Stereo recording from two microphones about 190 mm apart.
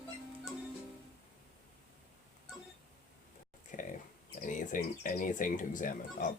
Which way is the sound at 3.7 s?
45° left (ahead or behind).